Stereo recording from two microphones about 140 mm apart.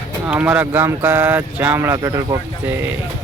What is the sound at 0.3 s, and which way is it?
Speech, 10° right (ahead or behind).